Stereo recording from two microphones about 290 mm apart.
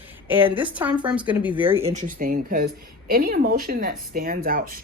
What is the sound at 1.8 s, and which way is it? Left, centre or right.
Speech, right.